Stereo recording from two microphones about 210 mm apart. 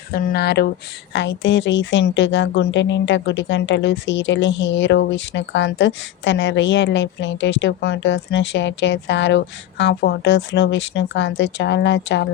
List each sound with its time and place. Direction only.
0.1 s speech: 45° left (ahead or behind)